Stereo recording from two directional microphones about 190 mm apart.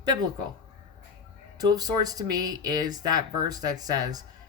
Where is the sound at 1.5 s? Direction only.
20° right (ahead or behind).